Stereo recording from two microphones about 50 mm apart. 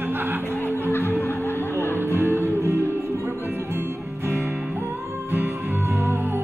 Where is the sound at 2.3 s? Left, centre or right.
Right.